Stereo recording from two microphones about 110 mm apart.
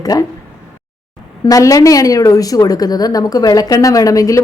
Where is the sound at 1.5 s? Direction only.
35° left (ahead or behind).